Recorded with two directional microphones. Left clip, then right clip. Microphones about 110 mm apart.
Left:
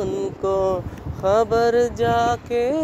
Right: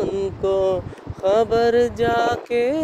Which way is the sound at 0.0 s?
25° right (ahead or behind).